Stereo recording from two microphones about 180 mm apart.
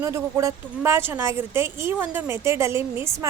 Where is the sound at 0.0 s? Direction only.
15° right (ahead or behind).